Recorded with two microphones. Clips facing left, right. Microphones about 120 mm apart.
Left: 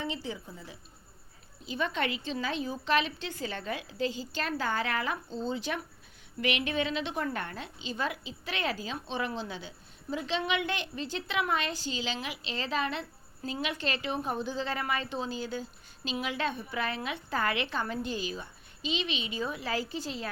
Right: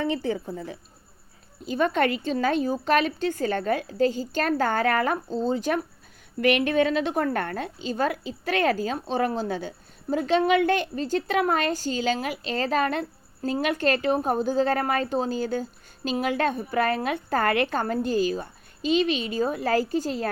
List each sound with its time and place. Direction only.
0.0 s a woman's voice: 55° right (ahead or behind)